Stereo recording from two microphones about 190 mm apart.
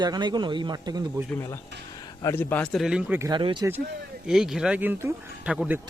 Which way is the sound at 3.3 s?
25° right (ahead or behind).